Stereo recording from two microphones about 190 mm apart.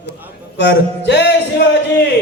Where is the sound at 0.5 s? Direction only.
65° left (ahead or behind).